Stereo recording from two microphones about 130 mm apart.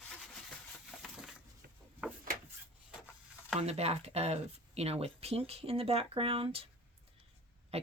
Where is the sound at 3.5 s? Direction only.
55° right (ahead or behind).